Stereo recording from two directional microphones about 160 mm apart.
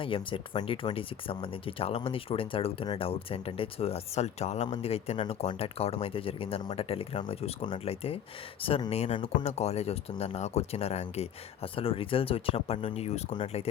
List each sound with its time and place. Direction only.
0.0 s speech: 35° left (ahead or behind)